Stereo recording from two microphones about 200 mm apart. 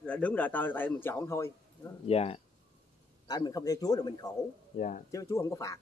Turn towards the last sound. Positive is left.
turn(degrees=15)  # may be behind; listen again after turning